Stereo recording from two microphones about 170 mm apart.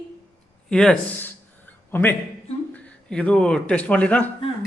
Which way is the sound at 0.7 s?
5° left (ahead or behind).